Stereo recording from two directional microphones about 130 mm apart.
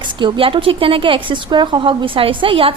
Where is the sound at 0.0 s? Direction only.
40° right (ahead or behind).